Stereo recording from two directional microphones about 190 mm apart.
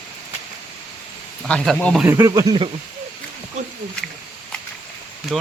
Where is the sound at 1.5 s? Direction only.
5° left (ahead or behind).